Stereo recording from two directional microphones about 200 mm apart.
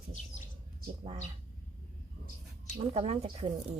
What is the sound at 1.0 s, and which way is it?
Speech, 30° right (ahead or behind).